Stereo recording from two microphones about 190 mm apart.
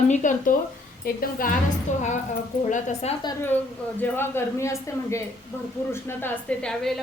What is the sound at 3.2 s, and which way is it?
Speech, 10° left (ahead or behind).